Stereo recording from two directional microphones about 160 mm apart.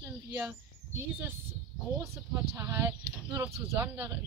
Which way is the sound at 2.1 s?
15° right (ahead or behind).